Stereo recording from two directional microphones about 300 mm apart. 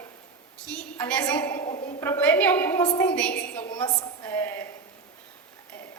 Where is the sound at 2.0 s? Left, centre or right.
Centre.